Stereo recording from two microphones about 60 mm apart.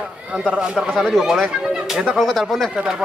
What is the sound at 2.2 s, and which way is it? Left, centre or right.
Speech, centre.